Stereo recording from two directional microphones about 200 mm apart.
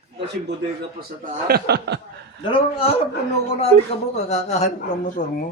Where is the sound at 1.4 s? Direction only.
55° right (ahead or behind).